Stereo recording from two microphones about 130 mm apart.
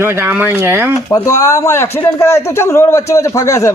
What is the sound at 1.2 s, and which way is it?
A man's voice, 25° left (ahead or behind).